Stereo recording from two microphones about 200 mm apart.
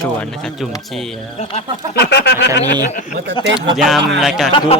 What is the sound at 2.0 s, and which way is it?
Speech, 55° left (ahead or behind).